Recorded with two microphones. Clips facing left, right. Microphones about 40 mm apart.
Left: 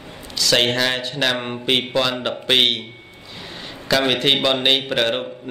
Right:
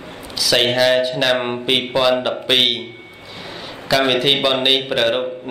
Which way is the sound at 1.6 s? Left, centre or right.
Centre.